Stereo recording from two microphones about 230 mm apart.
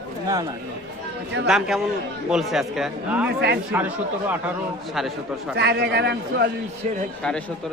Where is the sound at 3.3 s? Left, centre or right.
Right.